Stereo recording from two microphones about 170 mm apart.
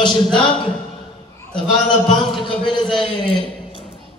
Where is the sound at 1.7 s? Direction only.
25° left (ahead or behind).